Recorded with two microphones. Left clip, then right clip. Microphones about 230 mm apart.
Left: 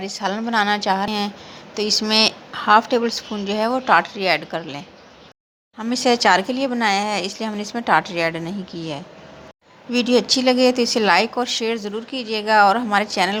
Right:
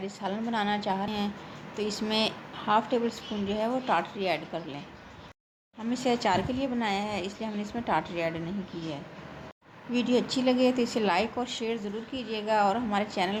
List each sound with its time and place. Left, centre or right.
0.0 s speech: centre
5.8 s a woman's voice: centre